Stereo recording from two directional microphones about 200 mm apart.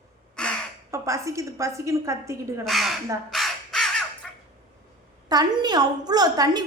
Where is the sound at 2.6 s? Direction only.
Centre (ahead or behind).